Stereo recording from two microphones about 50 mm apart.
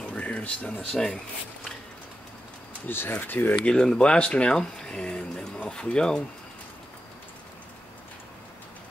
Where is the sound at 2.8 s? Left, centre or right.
Left.